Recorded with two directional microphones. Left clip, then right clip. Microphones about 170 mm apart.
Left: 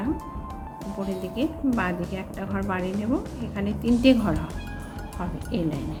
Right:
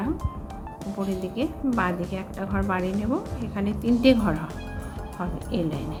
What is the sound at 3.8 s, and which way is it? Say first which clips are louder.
Speech: even; 10° right (ahead or behind).